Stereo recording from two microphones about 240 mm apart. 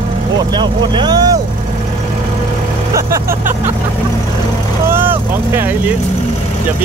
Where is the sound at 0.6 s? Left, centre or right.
Centre.